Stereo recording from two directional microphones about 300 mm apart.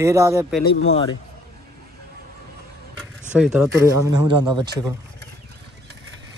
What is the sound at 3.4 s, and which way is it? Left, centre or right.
Speech, centre.